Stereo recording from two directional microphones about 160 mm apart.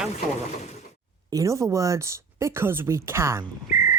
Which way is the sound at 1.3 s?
20° right (ahead or behind).